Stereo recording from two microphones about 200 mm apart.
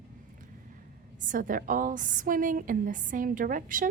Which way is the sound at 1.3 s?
45° right (ahead or behind).